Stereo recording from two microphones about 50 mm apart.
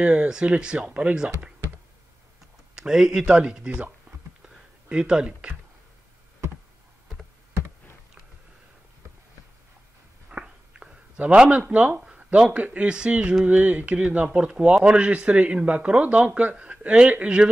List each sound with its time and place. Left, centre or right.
0.0 s speech: right
2.7 s speech: centre
4.9 s speech: centre
10.3 s a sound: right
12.0 s speech: right